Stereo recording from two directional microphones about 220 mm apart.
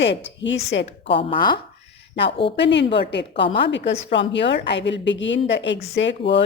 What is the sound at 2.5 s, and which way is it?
Speech, 55° left (ahead or behind).